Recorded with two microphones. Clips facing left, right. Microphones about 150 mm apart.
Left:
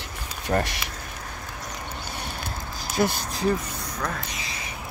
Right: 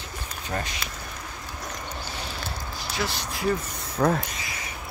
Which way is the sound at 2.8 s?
50° left (ahead or behind).